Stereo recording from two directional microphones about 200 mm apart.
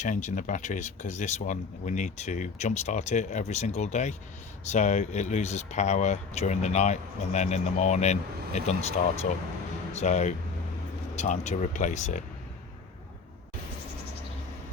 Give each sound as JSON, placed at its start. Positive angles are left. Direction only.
{"t": 0.0, "sound": "speech", "side_deg": 35}